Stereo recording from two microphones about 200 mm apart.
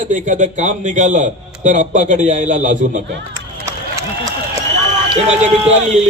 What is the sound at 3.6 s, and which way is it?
Run, 15° right (ahead or behind).